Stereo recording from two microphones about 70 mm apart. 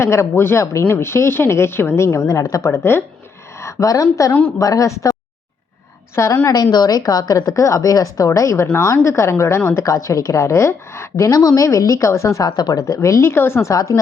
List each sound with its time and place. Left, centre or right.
0.0 s a woman's voice: left
4.3 s a woman's voice: left
4.5 s a woman's voice: left
6.2 s a woman's voice: left
11.3 s a woman's voice: left
12.5 s speech: left
12.9 s a woman's voice: left